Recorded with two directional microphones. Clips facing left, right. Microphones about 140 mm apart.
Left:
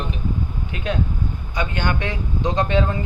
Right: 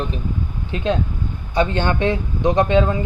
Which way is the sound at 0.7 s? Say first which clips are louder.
Right 4 dB; 25° right (ahead or behind).